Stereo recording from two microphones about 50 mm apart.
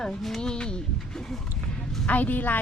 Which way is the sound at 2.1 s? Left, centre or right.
Left.